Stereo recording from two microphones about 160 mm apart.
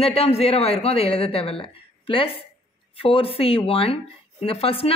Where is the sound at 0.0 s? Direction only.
40° left (ahead or behind).